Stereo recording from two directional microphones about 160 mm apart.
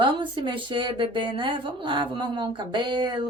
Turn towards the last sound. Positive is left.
turn(degrees=-30)  # may be behind; listen again after turning